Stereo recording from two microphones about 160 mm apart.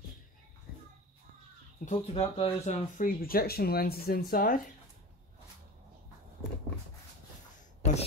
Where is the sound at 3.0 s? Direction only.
65° left (ahead or behind).